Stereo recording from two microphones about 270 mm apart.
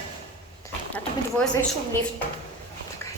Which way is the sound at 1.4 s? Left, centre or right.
Centre.